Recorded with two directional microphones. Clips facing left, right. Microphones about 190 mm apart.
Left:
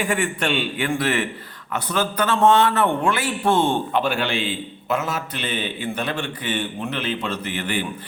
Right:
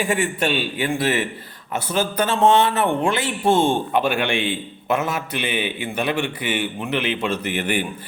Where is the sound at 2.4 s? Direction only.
15° right (ahead or behind).